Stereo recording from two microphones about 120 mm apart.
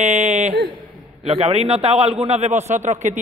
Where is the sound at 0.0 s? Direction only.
70° right (ahead or behind).